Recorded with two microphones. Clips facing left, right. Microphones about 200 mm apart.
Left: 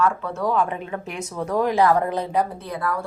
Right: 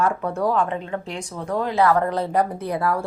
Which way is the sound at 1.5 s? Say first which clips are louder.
Left 1 dB; 15° left (ahead or behind).